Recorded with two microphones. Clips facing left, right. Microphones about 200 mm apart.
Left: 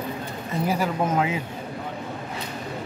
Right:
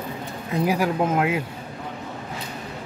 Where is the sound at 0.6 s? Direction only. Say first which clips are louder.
Right 2 dB; 10° right (ahead or behind).